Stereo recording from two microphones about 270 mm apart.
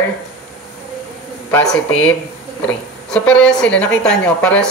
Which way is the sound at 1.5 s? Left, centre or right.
Centre.